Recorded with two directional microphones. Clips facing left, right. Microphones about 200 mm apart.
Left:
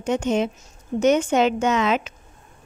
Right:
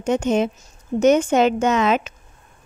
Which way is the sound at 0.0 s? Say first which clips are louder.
Right 2 dB; 45° right (ahead or behind).